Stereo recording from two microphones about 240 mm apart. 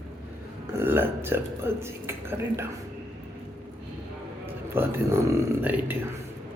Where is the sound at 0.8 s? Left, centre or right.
Centre.